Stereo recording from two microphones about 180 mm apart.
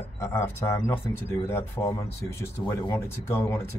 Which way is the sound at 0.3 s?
15° left (ahead or behind).